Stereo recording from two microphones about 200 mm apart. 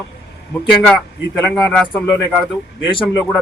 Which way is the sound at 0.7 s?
5° left (ahead or behind).